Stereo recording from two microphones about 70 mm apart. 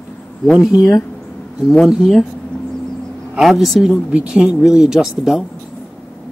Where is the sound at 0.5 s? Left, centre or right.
Centre.